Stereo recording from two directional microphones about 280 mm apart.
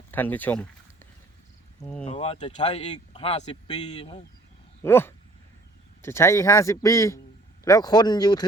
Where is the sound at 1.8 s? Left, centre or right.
Centre.